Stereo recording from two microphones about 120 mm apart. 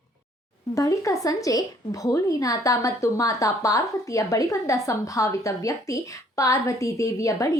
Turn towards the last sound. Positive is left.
turn(degrees=25)  # may be behind; listen again after turning